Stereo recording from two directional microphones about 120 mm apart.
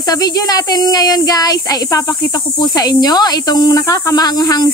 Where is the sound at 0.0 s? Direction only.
30° left (ahead or behind).